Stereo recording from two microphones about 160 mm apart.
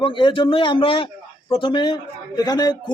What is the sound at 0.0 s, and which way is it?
A man's voice, 30° left (ahead or behind).